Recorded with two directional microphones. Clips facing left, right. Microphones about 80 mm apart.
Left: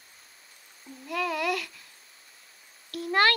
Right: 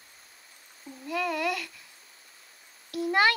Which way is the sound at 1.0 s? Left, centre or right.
Centre.